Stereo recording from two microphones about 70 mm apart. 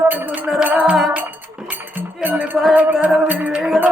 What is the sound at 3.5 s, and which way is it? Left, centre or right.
Music, centre.